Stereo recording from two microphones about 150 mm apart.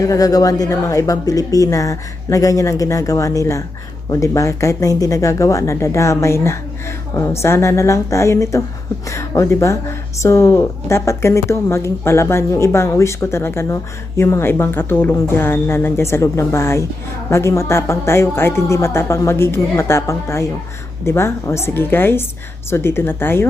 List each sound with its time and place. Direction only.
0.0 s a woman's voice: 25° left (ahead or behind)